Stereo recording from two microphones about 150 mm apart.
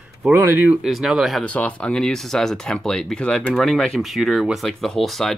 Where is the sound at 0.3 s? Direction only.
15° right (ahead or behind).